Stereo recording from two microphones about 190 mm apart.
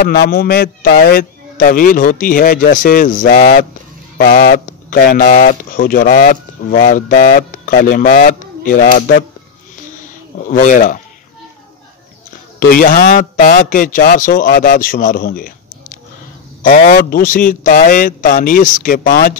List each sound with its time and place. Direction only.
0.0 s a man's voice: 55° left (ahead or behind)
10.4 s a man's voice: 45° left (ahead or behind)
12.5 s a man's voice: 50° left (ahead or behind)